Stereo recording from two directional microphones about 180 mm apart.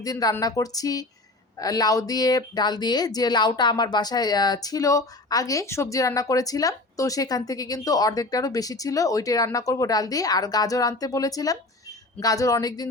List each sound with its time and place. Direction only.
0.0 s speech: 20° left (ahead or behind)